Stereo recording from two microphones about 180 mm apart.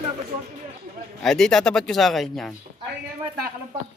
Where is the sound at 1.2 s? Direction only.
Centre (ahead or behind).